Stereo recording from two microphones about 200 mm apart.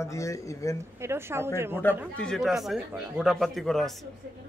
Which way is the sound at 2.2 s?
Centre (ahead or behind).